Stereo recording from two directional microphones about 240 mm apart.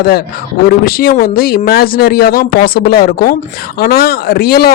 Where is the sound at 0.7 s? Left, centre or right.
Left.